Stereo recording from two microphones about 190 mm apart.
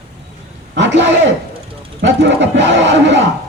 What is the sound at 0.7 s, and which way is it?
Speech, 70° right (ahead or behind).